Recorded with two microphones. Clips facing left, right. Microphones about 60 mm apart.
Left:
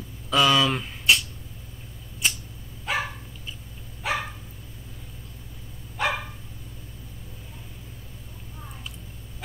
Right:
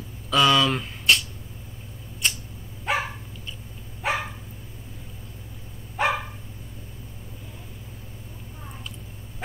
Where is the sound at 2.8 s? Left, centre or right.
Right.